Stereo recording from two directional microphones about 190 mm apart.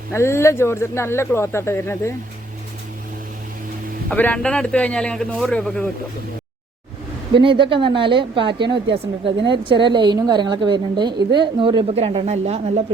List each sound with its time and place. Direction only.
0.1 s speech: 15° left (ahead or behind)
4.1 s speech: 5° left (ahead or behind)
7.4 s a woman's voice: 25° right (ahead or behind)